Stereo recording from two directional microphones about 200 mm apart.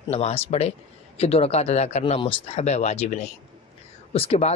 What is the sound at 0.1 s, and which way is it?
A man's voice, 30° left (ahead or behind).